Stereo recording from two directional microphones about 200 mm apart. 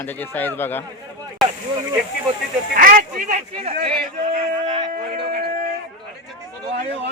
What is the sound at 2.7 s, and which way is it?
A man's voice, 45° right (ahead or behind).